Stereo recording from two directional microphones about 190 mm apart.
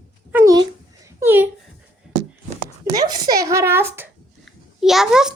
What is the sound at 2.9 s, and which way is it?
Speech, 20° right (ahead or behind).